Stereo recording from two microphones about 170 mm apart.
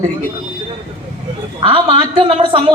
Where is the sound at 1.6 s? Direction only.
30° right (ahead or behind).